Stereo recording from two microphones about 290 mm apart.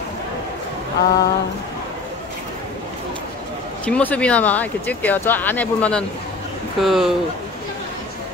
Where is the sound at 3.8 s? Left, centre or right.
Centre.